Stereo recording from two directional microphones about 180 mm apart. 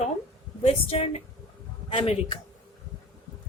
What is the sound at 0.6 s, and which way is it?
A woman's voice, 35° left (ahead or behind).